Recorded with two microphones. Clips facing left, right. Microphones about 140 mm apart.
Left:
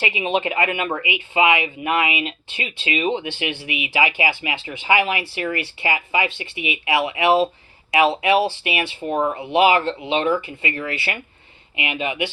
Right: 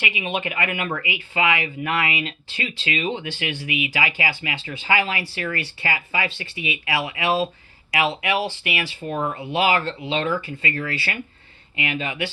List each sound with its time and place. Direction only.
0.0 s speech: 30° left (ahead or behind)